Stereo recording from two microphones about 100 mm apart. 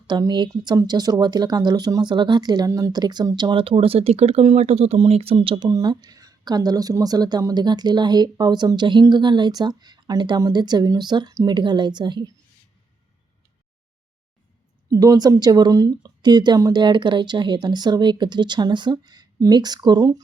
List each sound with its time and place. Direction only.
0.1 s speech: 45° right (ahead or behind); by 5.6 s 60° right (ahead or behind)
5.6 s speech: 40° right (ahead or behind)
14.8 s a woman's voice: 40° right (ahead or behind)
16.8 s speech: 50° right (ahead or behind)